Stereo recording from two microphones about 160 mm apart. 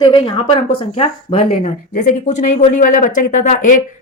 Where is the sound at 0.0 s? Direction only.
25° left (ahead or behind).